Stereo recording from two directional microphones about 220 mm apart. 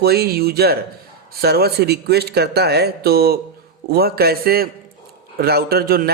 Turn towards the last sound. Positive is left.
turn(degrees=-45)  # may be behind; listen again after turning